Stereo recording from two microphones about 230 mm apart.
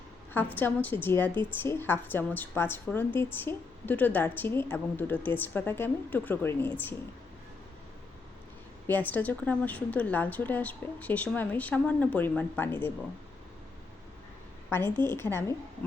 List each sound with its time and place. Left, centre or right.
0.3 s a woman's voice: centre
8.9 s a woman's voice: centre
14.7 s a woman's voice: centre